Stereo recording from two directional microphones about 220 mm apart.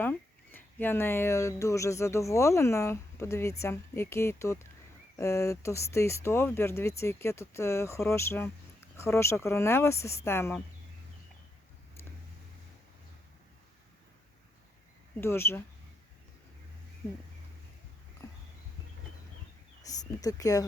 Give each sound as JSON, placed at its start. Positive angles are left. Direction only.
{"t": 0.0, "sound": "speech", "side_deg": 10}
{"t": 15.2, "sound": "speech", "side_deg": 10}
{"t": 18.2, "sound": "a sound", "side_deg": 15}
{"t": 19.8, "sound": "speech", "side_deg": 15}